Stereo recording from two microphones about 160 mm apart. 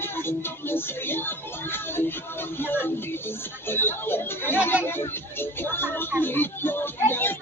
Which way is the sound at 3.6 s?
15° left (ahead or behind).